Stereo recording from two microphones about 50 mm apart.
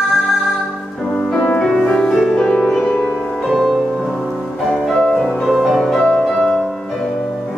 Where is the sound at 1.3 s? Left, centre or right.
Left.